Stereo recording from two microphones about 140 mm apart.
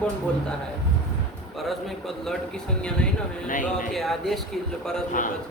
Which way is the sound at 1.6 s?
Centre (ahead or behind).